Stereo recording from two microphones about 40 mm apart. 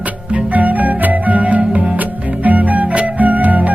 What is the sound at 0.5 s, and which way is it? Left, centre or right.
Music, right.